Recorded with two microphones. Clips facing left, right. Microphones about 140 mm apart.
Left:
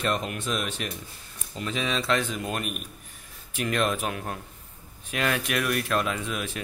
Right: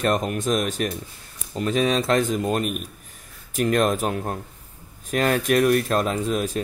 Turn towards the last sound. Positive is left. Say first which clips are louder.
# right 7 dB
turn(degrees=-40)  # may be behind; listen again after turning